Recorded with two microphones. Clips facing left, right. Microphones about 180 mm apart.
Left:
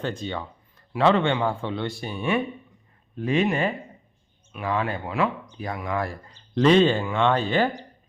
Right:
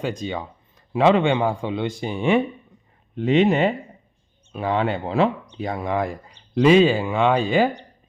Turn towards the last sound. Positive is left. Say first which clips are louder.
# right 3 dB
turn(degrees=-10)  # may be behind; listen again after turning